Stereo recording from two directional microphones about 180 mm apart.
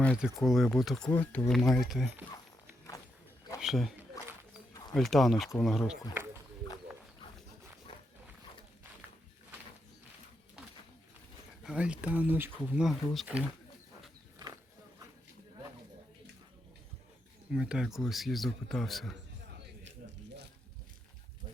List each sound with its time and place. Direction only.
0.0 s speech: centre (ahead or behind)
3.6 s a man's voice: centre (ahead or behind)
11.6 s speech: 5° right (ahead or behind)
14.3 s a sound: 20° right (ahead or behind)
17.5 s speech: 5° right (ahead or behind)
19.5 s a sound: 70° right (ahead or behind)